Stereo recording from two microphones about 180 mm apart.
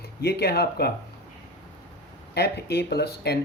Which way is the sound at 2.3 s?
65° left (ahead or behind).